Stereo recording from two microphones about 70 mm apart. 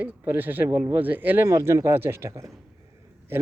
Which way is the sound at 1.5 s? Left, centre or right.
Right.